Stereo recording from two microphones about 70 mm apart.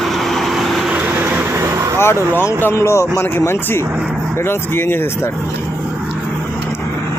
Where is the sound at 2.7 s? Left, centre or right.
Left.